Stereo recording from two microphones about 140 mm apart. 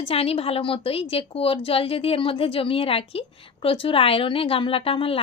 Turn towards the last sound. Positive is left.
turn(degrees=40)  # may be behind; listen again after turning